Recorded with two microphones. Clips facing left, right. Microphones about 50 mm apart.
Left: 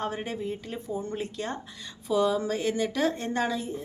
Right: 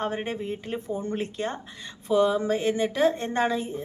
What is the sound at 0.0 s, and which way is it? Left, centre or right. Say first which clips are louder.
Speech: right 2 dB; right.